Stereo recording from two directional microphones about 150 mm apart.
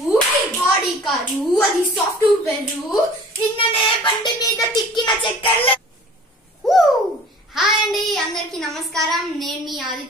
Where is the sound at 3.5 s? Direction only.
30° left (ahead or behind).